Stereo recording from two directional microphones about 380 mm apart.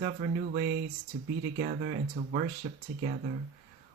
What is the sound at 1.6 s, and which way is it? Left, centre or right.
Speech, right.